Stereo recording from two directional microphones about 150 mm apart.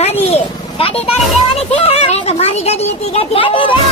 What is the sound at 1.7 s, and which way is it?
Speech, 40° left (ahead or behind).